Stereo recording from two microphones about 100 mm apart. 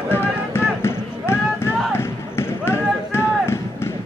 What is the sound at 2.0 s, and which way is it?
Basketball bounce, 25° left (ahead or behind).